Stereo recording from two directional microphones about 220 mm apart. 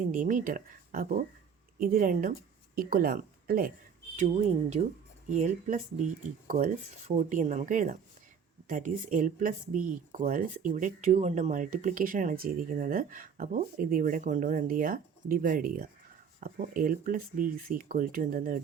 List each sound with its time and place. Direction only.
0.1 s speech: 35° right (ahead or behind)
7.3 s speech: 35° right (ahead or behind)